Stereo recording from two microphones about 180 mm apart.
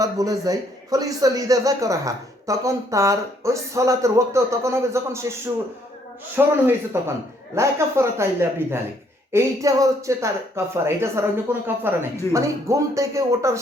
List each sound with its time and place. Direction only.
0.0 s a man's voice: 20° right (ahead or behind)
6.3 s a man's voice: 10° right (ahead or behind)